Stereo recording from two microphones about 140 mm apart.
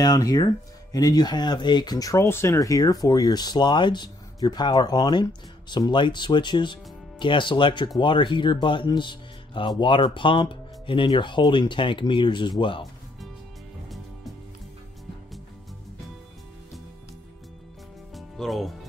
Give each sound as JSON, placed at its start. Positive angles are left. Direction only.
{"t": 0.0, "sound": "speech", "side_deg": 30}
{"t": 18.1, "sound": "music", "side_deg": 0}